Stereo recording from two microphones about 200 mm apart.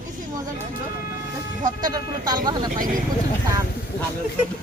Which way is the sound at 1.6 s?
20° right (ahead or behind).